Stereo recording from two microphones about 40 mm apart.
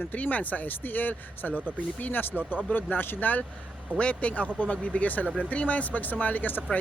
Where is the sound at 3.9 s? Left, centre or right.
Left.